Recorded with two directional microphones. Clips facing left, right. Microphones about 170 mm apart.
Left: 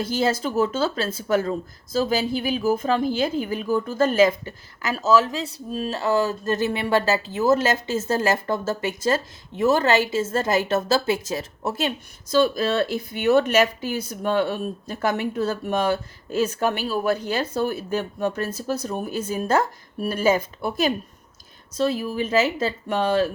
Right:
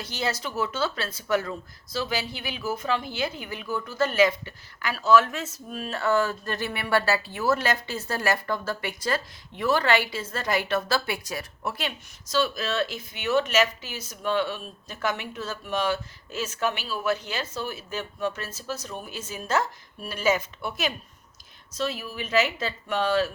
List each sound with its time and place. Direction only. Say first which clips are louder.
0.4 s speech: left 6 dB; 45° left (ahead or behind)
5.5 s speech: left 7 dB; 30° left (ahead or behind)
5.9 s speech: left 2 dB; 20° left (ahead or behind)
12.4 s speech: left 6 dB; 50° left (ahead or behind)
13.4 s speech: left 5 dB; 55° left (ahead or behind)
20.2 s speech: left 3 dB; 35° left (ahead or behind)
22.4 s speech: left 2 dB; 30° left (ahead or behind)
22.6 s speech: left 4 dB; 45° left (ahead or behind)